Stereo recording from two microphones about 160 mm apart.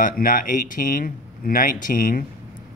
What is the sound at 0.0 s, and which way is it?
Speech, 60° left (ahead or behind).